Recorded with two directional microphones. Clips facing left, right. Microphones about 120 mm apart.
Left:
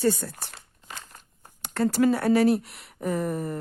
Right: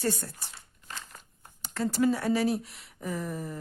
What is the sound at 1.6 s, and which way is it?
Speech, 65° left (ahead or behind).